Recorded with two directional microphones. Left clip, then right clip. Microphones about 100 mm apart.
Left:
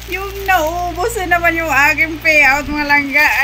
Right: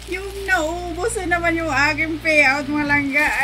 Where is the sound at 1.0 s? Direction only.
35° right (ahead or behind).